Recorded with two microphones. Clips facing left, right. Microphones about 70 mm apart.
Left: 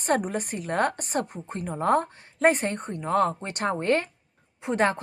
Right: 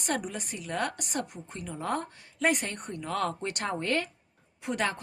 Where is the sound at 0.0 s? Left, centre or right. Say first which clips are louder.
Left 7 dB; left.